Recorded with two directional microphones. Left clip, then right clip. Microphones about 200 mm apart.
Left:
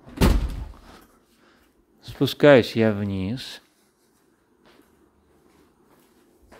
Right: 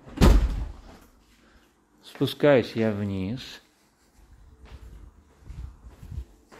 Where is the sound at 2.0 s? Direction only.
25° left (ahead or behind).